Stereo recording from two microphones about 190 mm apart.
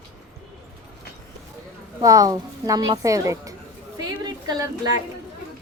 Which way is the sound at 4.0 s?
20° right (ahead or behind).